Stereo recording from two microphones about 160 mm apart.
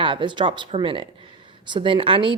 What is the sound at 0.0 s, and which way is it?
Speech, 30° right (ahead or behind).